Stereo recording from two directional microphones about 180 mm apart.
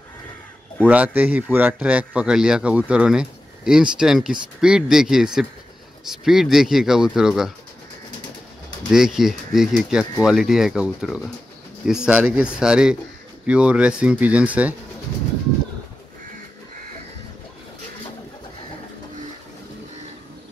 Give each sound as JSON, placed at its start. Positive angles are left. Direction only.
{"t": 0.8, "sound": "a man's voice", "side_deg": -10}
{"t": 8.9, "sound": "a man's voice", "side_deg": 0}